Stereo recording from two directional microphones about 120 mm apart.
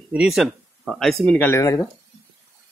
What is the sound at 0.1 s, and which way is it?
Speech, 5° right (ahead or behind).